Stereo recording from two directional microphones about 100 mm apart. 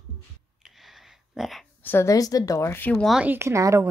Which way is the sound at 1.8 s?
30° left (ahead or behind).